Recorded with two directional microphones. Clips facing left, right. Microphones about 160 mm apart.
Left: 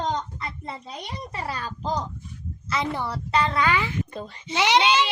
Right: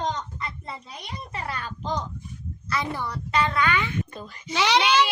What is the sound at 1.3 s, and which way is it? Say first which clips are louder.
Speech: left 1 dB; 35° left (ahead or behind).